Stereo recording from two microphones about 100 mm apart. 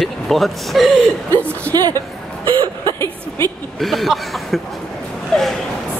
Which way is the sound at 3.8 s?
Centre (ahead or behind).